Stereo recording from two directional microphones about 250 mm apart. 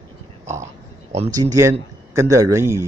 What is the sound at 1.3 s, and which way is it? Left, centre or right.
Speech, centre.